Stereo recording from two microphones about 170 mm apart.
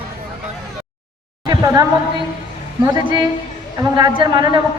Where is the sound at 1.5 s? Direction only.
20° right (ahead or behind).